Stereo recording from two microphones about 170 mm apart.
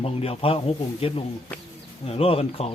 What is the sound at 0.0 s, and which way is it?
Speech, 35° left (ahead or behind).